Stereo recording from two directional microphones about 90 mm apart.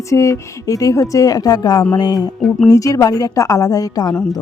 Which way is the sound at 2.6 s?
40° left (ahead or behind).